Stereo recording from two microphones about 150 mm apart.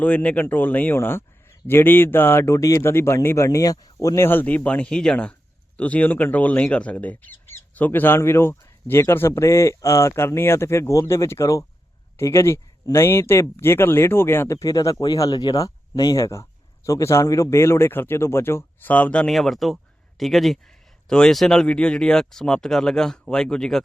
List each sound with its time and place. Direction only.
0.0 s speech: 10° left (ahead or behind)